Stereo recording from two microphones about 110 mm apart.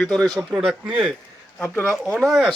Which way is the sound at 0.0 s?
5° left (ahead or behind).